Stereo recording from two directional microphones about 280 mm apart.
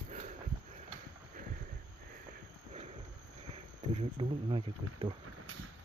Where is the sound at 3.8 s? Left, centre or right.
Centre.